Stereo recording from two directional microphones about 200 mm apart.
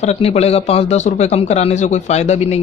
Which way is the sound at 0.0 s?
35° left (ahead or behind).